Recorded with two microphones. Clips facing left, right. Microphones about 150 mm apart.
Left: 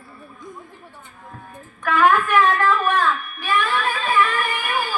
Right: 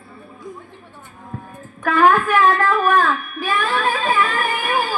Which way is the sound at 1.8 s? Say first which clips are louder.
Right 2 dB; 40° right (ahead or behind).